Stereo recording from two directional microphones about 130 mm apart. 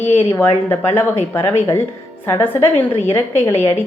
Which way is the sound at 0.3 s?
15° left (ahead or behind).